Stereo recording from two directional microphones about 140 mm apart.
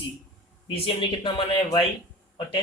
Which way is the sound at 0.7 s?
40° left (ahead or behind).